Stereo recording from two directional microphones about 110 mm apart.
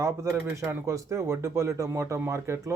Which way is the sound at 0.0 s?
25° right (ahead or behind).